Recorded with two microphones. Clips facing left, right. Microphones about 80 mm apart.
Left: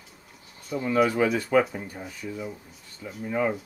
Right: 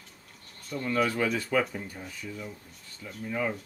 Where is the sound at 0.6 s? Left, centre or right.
Centre.